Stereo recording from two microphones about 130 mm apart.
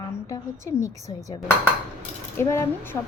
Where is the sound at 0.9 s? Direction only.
60° right (ahead or behind).